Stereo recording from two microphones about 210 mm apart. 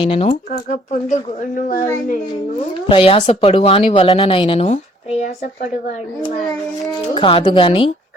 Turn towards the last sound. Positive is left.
turn(degrees=25)  # may be behind; listen again after turning